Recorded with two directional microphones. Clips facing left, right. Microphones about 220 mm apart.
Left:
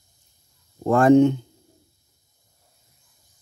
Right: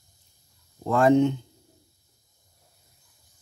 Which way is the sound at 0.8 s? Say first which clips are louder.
Left 5 dB; 45° left (ahead or behind).